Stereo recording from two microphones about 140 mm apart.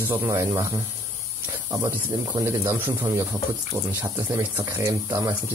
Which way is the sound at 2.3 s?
20° right (ahead or behind).